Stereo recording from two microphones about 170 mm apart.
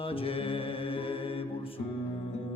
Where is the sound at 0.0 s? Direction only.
35° left (ahead or behind).